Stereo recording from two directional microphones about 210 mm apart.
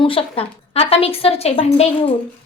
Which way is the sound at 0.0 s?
25° left (ahead or behind).